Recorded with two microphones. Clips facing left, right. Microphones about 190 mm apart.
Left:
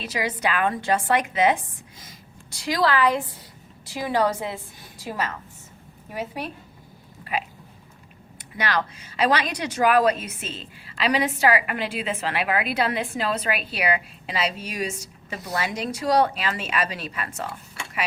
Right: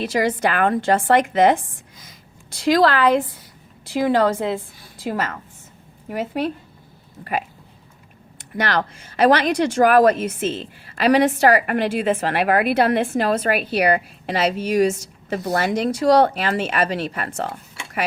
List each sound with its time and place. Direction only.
0.0 s a woman's voice: 45° right (ahead or behind)
8.4 s speech: 50° right (ahead or behind)
16.0 s speech: 70° right (ahead or behind)
16.6 s speech: 50° right (ahead or behind)